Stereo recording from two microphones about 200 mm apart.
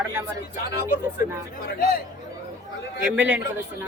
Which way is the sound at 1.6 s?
45° left (ahead or behind).